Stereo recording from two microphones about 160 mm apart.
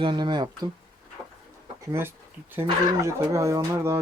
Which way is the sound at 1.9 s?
15° right (ahead or behind).